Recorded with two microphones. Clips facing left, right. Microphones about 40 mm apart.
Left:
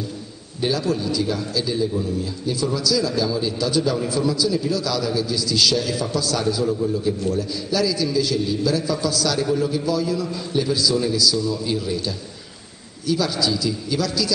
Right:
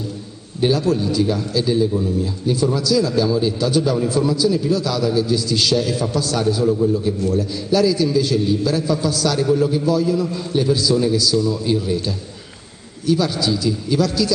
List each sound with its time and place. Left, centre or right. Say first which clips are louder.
0.6 s a man's voice: right 5 dB; right
7.7 s a man's voice: right 5 dB; right